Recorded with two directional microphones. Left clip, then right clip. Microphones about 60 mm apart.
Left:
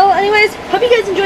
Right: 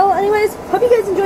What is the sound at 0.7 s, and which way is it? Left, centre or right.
Speech, left.